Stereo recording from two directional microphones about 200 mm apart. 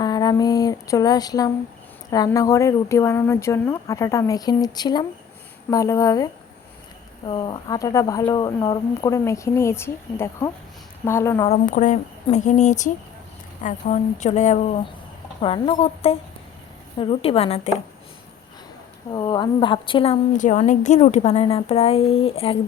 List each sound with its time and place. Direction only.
0.0 s a sound: 20° left (ahead or behind)
2.0 s speech: 20° left (ahead or behind)
11.4 s a woman's voice: 35° left (ahead or behind)
19.1 s a woman's voice: 20° left (ahead or behind)
20.3 s a woman's voice: 40° left (ahead or behind)